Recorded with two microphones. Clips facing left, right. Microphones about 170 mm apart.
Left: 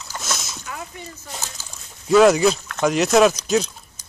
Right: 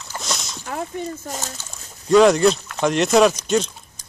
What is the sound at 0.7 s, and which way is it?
Speech, 45° right (ahead or behind).